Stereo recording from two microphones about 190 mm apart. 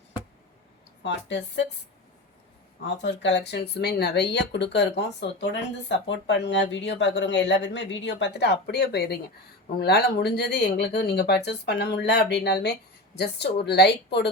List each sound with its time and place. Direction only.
1.0 s speech: 70° left (ahead or behind)
3.0 s speech: 70° left (ahead or behind)